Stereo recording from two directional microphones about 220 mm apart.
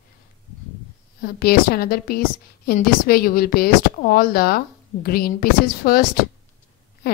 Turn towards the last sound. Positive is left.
turn(degrees=45)  # may be behind; listen again after turning